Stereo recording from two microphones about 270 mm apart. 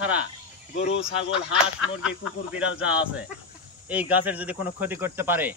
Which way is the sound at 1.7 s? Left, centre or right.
Centre.